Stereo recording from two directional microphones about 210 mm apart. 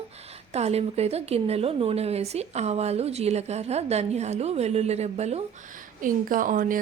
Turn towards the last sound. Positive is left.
turn(degrees=-40)  # may be behind; listen again after turning